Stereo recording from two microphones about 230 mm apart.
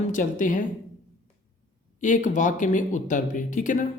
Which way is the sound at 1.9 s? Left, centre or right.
Left.